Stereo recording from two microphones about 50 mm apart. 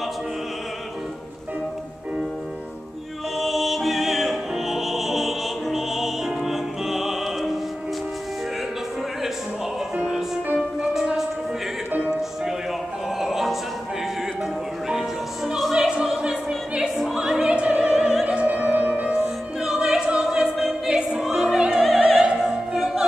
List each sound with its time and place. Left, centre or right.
3.3 s music: centre
10.8 s music: centre
13.2 s music: centre
14.9 s music: centre
15.7 s opera: centre
17.9 s opera: centre
18.2 s music: right
19.8 s opera: centre
20.2 s choir: centre
20.8 s music: centre
21.3 s opera: centre
21.7 s opera: centre